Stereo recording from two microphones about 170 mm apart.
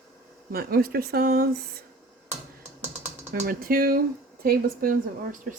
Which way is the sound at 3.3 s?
60° right (ahead or behind).